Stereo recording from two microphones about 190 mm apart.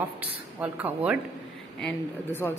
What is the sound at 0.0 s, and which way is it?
Speech, 10° right (ahead or behind).